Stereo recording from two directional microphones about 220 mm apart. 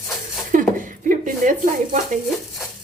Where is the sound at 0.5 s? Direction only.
35° right (ahead or behind).